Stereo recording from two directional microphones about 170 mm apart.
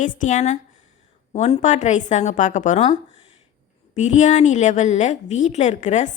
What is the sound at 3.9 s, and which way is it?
A woman's voice, 45° left (ahead or behind).